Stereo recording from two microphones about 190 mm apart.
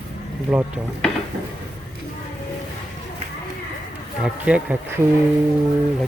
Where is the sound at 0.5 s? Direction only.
5° right (ahead or behind).